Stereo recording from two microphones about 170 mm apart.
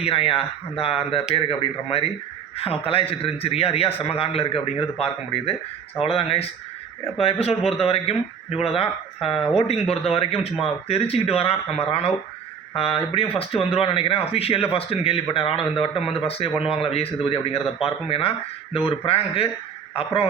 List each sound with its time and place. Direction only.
0.0 s a man's voice: 35° left (ahead or behind)